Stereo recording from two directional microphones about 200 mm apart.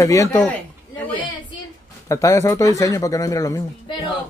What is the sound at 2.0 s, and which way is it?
Speech, 15° left (ahead or behind).